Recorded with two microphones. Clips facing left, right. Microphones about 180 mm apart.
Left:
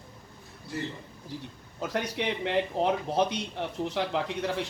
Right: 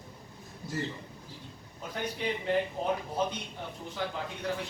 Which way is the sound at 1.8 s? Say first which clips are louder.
Left 5 dB; 80° left.